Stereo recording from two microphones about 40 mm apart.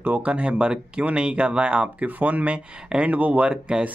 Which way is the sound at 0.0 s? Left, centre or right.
Right.